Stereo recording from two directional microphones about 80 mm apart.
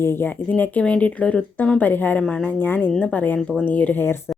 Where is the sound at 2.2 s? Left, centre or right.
Centre.